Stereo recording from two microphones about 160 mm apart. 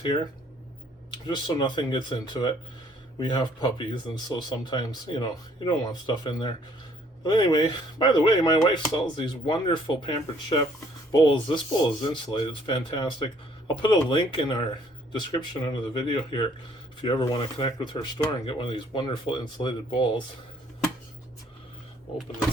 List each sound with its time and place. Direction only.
1.3 s speech: 30° left (ahead or behind)